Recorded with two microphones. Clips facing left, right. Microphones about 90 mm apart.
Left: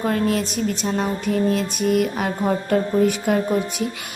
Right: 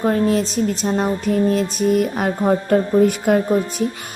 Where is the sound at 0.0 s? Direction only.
35° right (ahead or behind).